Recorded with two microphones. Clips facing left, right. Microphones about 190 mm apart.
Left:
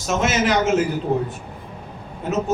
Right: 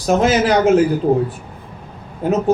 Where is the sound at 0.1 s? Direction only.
35° right (ahead or behind).